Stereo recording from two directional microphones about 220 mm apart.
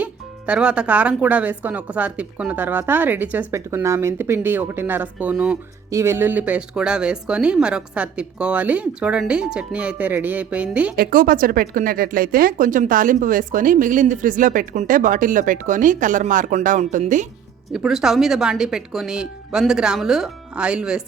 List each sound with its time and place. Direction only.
0.0 s speech: 5° right (ahead or behind)
10.9 s speech: 40° right (ahead or behind)
17.7 s speech: centre (ahead or behind)